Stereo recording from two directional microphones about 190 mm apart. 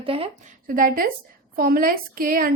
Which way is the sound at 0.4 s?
45° right (ahead or behind).